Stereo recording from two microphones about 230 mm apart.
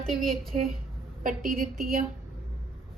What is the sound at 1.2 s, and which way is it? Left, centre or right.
Speech, right.